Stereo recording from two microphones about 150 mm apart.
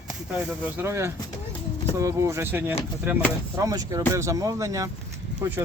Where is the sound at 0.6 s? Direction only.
15° right (ahead or behind).